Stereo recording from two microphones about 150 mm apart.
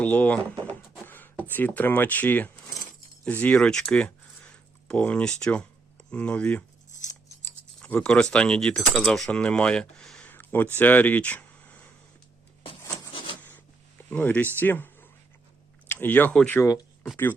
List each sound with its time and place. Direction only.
0.0 s speech: 10° left (ahead or behind)
1.0 s a sound: 15° left (ahead or behind)
1.5 s speech: 10° left (ahead or behind)
7.8 s speech: 5° left (ahead or behind)
13.1 s a sound: 35° left (ahead or behind)
14.1 s speech: 10° left (ahead or behind)
16.6 s speech: 25° left (ahead or behind)